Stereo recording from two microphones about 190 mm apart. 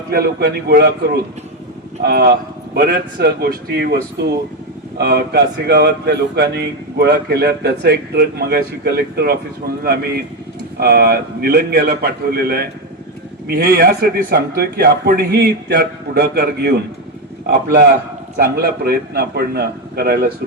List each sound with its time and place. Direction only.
0.1 s a man's voice: 55° right (ahead or behind)
18.3 s a man's voice: 55° right (ahead or behind)